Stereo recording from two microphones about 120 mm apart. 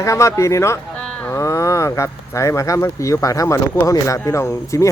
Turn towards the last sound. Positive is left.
turn(degrees=25)  # may be behind; listen again after turning